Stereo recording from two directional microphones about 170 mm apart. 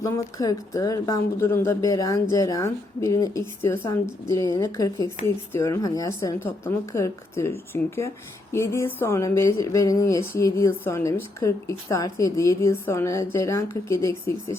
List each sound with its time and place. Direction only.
0.0 s speech: 20° left (ahead or behind)